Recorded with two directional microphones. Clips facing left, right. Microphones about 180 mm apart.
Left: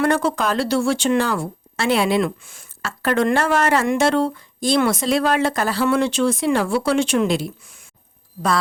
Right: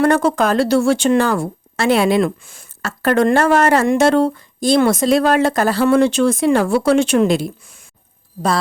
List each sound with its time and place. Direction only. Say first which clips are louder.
0.0 s speech: right 5 dB; 45° right (ahead or behind)